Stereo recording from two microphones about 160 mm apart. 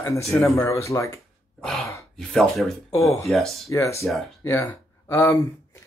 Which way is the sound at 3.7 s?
20° left (ahead or behind).